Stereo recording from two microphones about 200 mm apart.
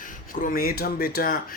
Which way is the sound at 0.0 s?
45° left (ahead or behind).